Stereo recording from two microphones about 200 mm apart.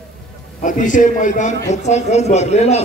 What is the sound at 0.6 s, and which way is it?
A man's voice, 40° left (ahead or behind).